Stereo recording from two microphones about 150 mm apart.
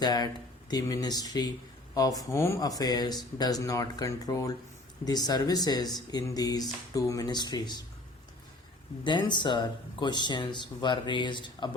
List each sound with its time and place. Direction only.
0.0 s speech: 25° left (ahead or behind)
9.0 s speech: 30° left (ahead or behind)